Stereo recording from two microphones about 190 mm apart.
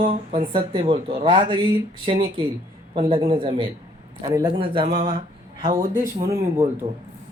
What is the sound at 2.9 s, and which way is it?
Speech, 30° right (ahead or behind).